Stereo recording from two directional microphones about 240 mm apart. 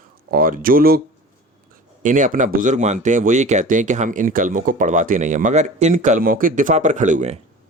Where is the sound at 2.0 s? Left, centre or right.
Right.